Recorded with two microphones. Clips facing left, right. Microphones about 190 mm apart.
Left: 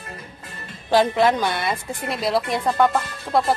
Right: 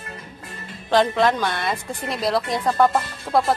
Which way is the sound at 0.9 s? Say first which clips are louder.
Left 1 dB; 10° left (ahead or behind).